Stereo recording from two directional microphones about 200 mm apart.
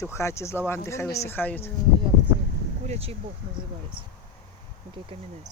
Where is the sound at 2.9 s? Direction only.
30° right (ahead or behind).